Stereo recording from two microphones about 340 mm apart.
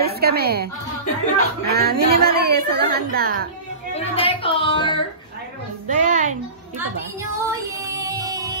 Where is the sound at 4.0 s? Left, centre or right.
Centre.